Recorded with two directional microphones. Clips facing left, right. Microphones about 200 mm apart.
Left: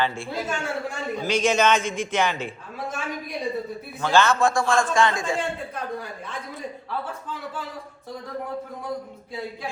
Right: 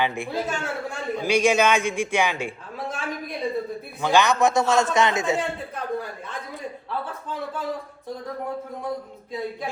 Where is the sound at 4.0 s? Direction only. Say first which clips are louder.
Even; 15° right (ahead or behind).